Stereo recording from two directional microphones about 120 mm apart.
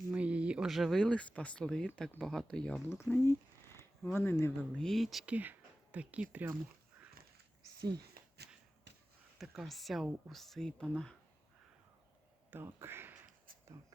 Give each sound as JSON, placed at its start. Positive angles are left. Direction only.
{"t": 0.1, "sound": "speech", "side_deg": -10}
{"t": 3.0, "sound": "speech", "side_deg": 20}
{"t": 4.7, "sound": "speech", "side_deg": 5}
{"t": 5.2, "sound": "speech", "side_deg": -15}
{"t": 7.6, "sound": "a sound", "side_deg": -35}
{"t": 9.4, "sound": "speech", "side_deg": 0}
{"t": 12.5, "sound": "speech", "side_deg": -20}